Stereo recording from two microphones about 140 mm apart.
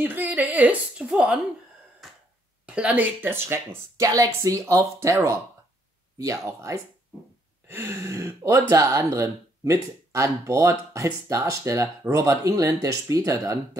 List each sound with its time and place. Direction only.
0.0 s a woman's voice: 15° right (ahead or behind)
2.0 s a sound: centre (ahead or behind)
2.6 s speech: 10° right (ahead or behind)